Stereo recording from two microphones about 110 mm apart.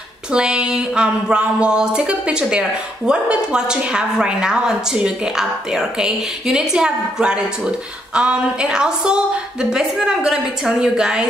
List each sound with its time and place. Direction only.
0.3 s a woman's voice: 10° right (ahead or behind)